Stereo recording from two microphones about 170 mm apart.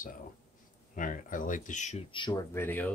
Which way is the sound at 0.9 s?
50° left (ahead or behind).